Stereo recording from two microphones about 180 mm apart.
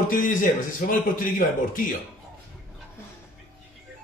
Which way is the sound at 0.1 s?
45° left (ahead or behind).